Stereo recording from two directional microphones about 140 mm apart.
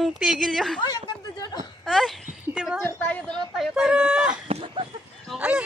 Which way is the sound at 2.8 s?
10° left (ahead or behind).